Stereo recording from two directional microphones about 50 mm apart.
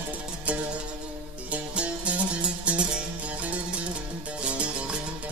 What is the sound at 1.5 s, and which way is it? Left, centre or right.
Music, right.